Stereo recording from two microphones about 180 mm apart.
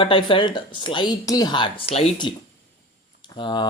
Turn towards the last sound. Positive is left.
turn(degrees=25)  # may be behind; listen again after turning